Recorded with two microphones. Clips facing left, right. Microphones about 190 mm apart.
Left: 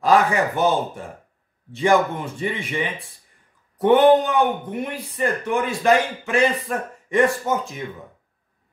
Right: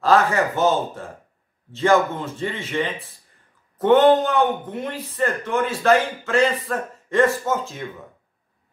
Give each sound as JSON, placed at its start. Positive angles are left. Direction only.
{"t": 0.0, "sound": "a man's voice", "side_deg": 15}